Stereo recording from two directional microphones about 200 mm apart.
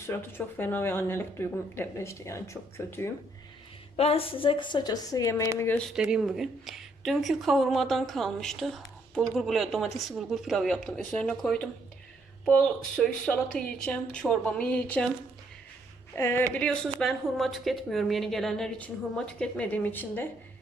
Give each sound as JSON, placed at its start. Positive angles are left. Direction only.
{"t": 0.0, "sound": "speech", "side_deg": 10}
{"t": 3.9, "sound": "speech", "side_deg": 30}
{"t": 6.0, "sound": "speech", "side_deg": -5}
{"t": 13.0, "sound": "speech", "side_deg": 5}
{"t": 16.1, "sound": "speech", "side_deg": 10}